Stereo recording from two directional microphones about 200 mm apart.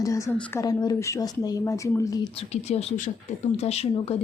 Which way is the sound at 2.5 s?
30° left (ahead or behind).